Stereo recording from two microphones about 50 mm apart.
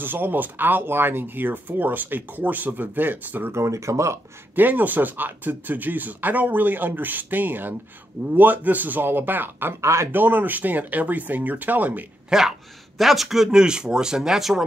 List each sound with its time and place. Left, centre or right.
0.0 s speech: right
3.5 s speech: right
4.6 s speech: right
9.8 s speech: right
10.1 s speech: right
12.3 s speech: centre